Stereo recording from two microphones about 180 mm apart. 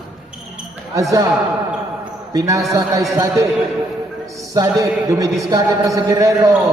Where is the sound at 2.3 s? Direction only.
20° right (ahead or behind).